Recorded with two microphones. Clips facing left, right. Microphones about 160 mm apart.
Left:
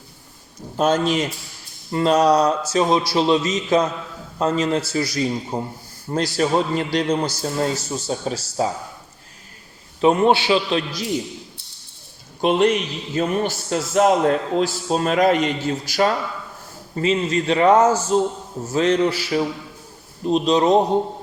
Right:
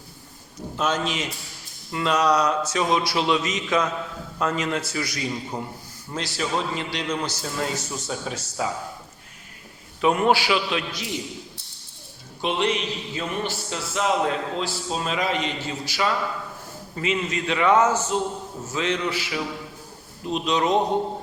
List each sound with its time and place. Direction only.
0.8 s a man's voice: 35° left (ahead or behind)
10.0 s a man's voice: 30° left (ahead or behind)
12.4 s a man's voice: 45° left (ahead or behind)
16.9 s a man's voice: 35° left (ahead or behind)